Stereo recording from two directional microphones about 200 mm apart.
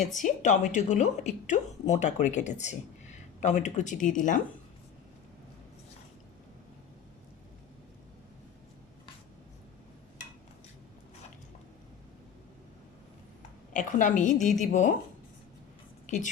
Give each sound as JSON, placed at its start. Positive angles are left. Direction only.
{"t": 0.0, "sound": "speech", "side_deg": 40}
{"t": 13.7, "sound": "speech", "side_deg": 40}
{"t": 16.0, "sound": "a woman's voice", "side_deg": 40}